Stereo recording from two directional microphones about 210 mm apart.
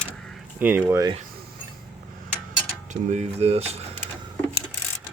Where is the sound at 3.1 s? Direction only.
30° right (ahead or behind).